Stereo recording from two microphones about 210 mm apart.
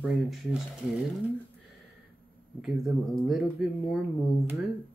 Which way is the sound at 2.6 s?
Centre (ahead or behind).